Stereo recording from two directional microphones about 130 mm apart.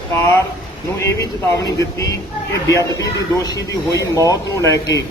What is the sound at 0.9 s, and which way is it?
Speech, 20° left (ahead or behind).